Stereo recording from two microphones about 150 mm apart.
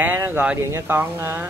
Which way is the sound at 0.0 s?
15° right (ahead or behind).